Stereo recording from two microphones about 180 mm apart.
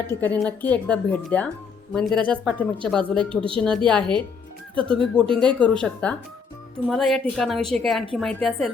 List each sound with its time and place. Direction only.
0.1 s speech: 10° left (ahead or behind)
3.2 s speech: 30° right (ahead or behind)
3.8 s speech: 5° left (ahead or behind)